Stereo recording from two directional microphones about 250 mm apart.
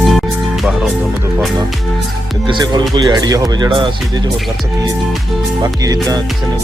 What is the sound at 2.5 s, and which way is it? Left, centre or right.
Speech, centre.